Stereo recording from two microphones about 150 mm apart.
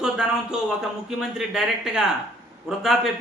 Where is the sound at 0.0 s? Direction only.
5° right (ahead or behind).